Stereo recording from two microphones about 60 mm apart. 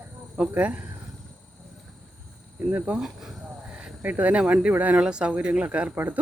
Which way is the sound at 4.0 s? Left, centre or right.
Right.